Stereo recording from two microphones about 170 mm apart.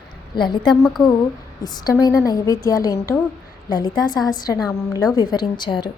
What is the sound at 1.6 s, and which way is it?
A woman's voice, 25° left (ahead or behind).